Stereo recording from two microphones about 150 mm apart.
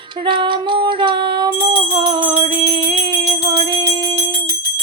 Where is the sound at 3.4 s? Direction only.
35° right (ahead or behind).